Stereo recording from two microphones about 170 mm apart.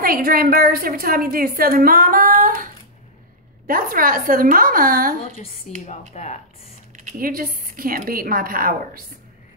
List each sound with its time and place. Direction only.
0.0 s a woman's voice: 60° right (ahead or behind)
5.4 s a woman's voice: 45° left (ahead or behind)
7.0 s a woman's voice: 50° right (ahead or behind)